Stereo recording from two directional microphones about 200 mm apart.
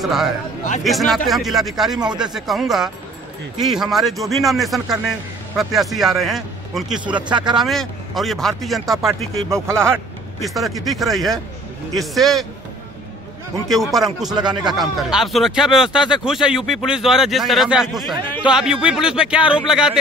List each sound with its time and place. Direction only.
0.0 s speech: centre (ahead or behind)
7.2 s speech: 25° right (ahead or behind)
7.5 s speech: centre (ahead or behind)
9.5 s speech: 15° right (ahead or behind)
10.4 s speech: centre (ahead or behind)
13.7 s speech: centre (ahead or behind)
14.4 s speech: 20° right (ahead or behind)
14.7 s speech: centre (ahead or behind)